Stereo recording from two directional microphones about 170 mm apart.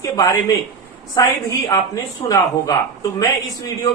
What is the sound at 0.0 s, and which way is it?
A man's voice, 20° left (ahead or behind).